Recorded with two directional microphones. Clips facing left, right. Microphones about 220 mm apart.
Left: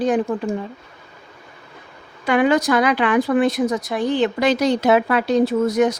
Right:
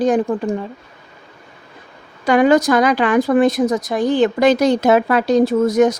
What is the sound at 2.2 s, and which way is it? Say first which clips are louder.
Speech: right 4 dB; 40° right (ahead or behind).